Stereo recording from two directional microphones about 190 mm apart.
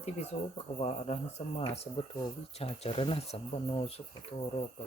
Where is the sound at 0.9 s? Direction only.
35° left (ahead or behind).